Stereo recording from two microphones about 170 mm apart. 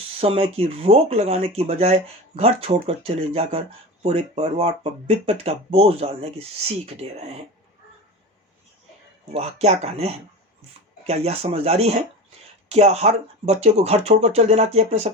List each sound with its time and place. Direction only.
0.2 s speech: 35° right (ahead or behind)
9.3 s speech: 35° right (ahead or behind)